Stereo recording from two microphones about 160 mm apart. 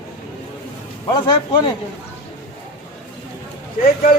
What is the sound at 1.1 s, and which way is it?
Speech, 25° left (ahead or behind).